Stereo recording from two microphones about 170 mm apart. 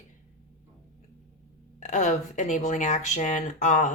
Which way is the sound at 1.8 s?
45° left (ahead or behind).